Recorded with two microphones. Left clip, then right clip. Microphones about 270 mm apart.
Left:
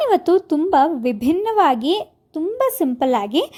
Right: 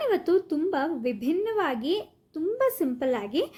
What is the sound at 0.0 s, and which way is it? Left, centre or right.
A woman's voice, left.